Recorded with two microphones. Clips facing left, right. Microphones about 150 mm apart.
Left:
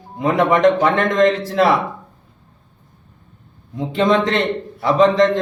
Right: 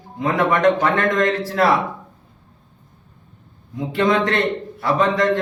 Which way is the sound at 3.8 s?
20° left (ahead or behind).